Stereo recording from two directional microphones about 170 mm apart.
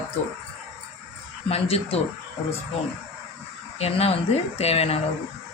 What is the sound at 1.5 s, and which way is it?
Speech, 35° left (ahead or behind).